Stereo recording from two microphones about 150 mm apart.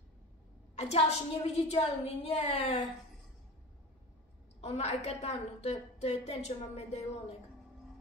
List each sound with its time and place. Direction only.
0.7 s a woman's voice: 45° left (ahead or behind)
4.6 s a woman's voice: 45° left (ahead or behind)